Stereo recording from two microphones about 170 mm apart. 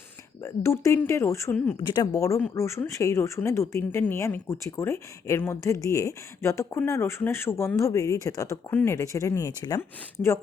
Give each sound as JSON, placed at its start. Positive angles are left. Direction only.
{"t": 0.4, "sound": "speech", "side_deg": 15}
{"t": 1.8, "sound": "speech", "side_deg": 25}